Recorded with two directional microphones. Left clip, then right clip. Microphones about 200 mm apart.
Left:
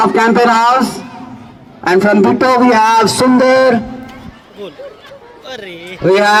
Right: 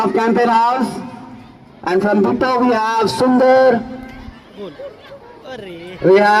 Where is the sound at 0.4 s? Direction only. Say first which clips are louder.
Left 4 dB; 55° left (ahead or behind).